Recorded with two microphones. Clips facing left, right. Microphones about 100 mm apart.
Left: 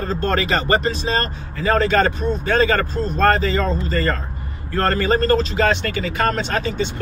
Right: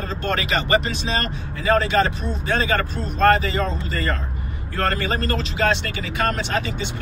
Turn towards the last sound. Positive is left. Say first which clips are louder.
# left 3 dB
turn(degrees=40)  # may be behind; listen again after turning